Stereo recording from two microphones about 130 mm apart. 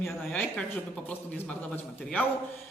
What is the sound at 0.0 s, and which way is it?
A man's voice, 10° left (ahead or behind).